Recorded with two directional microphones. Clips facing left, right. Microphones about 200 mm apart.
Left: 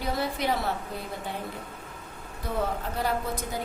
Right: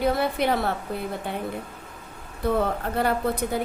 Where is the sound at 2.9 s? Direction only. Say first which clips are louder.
Right 7 dB; 60° right (ahead or behind).